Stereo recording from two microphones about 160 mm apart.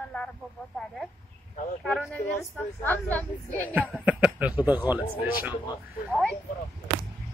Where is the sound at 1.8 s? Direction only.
5° left (ahead or behind).